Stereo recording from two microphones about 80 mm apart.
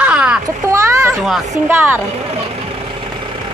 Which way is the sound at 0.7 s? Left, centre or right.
Right.